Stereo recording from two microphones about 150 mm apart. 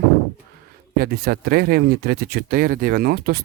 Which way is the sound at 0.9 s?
90° right.